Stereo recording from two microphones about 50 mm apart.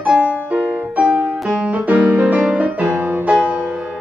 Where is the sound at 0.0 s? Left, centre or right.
Right.